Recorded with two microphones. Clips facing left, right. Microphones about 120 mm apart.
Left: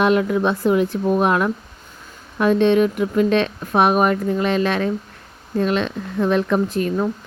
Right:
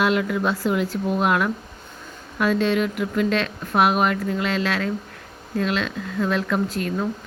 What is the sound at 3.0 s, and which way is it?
A woman's voice, 25° left (ahead or behind).